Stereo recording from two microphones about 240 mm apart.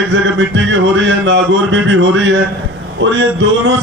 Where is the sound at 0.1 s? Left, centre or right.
Right.